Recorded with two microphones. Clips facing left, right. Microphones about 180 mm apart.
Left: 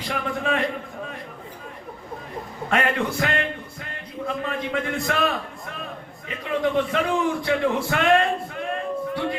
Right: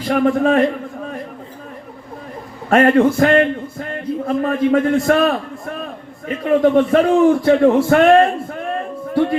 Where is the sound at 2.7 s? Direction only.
45° right (ahead or behind).